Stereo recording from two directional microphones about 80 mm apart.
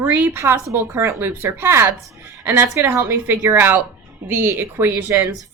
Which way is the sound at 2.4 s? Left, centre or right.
Right.